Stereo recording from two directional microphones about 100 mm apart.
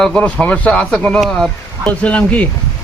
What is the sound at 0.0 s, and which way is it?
A man's voice, 10° left (ahead or behind).